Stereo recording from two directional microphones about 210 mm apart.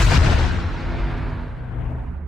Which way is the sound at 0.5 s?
Centre (ahead or behind).